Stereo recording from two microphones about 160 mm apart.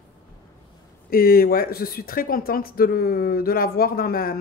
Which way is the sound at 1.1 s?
70° left (ahead or behind).